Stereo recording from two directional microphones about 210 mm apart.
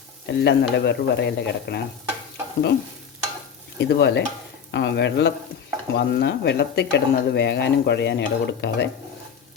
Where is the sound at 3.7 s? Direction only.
55° left (ahead or behind).